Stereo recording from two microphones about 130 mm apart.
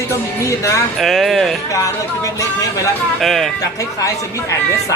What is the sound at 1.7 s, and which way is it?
Music, 25° left (ahead or behind).